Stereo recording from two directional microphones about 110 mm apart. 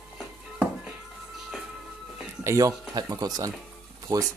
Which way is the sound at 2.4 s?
30° right (ahead or behind).